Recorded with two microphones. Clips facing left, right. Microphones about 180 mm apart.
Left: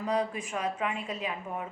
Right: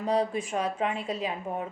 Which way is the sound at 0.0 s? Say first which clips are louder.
Right 3 dB; 30° right (ahead or behind).